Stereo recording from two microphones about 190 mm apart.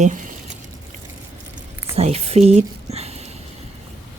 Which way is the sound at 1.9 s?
35° right (ahead or behind).